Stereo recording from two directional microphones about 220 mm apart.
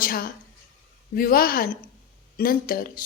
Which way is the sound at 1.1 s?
40° left (ahead or behind).